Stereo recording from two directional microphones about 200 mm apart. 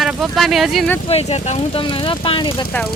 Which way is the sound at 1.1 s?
30° left (ahead or behind).